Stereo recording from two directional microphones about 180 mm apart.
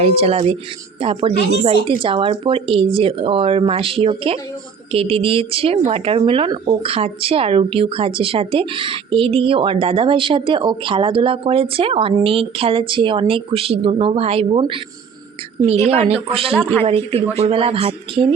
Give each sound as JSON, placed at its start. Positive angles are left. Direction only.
{"t": 0.0, "sound": "a woman's voice", "side_deg": -35}
{"t": 15.9, "sound": "a woman's voice", "side_deg": -35}